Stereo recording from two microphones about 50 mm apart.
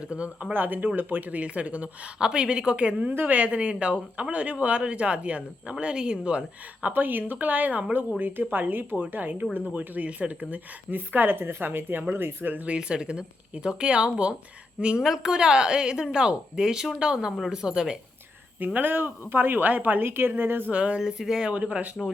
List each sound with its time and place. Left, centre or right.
0.0 s speech: right
0.5 s a woman's voice: right
2.2 s speech: centre
6.8 s a woman's voice: right
12.6 s a woman's voice: right
18.6 s a woman's voice: right
20.7 s speech: right
21.0 s a woman's voice: centre
21.5 s speech: right
22.0 s speech: centre